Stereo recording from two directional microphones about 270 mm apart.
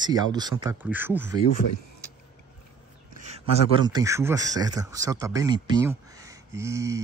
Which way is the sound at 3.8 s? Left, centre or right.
Centre.